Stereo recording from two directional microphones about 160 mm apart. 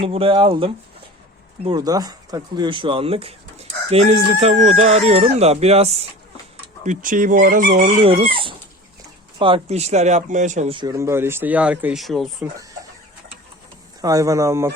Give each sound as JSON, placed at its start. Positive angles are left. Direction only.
{"t": 0.0, "sound": "speech", "side_deg": -35}
{"t": 6.8, "sound": "speech", "side_deg": -55}
{"t": 8.0, "sound": "speech", "side_deg": -35}
{"t": 10.7, "sound": "speech", "side_deg": -30}
{"t": 10.9, "sound": "speech", "side_deg": -15}
{"t": 14.0, "sound": "speech", "side_deg": -20}